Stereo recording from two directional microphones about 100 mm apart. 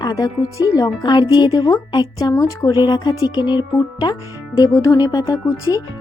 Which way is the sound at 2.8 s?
50° left (ahead or behind).